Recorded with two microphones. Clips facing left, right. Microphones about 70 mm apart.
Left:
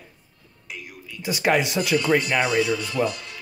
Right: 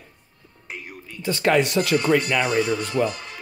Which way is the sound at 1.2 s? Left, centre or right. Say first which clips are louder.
Right 2 dB; centre.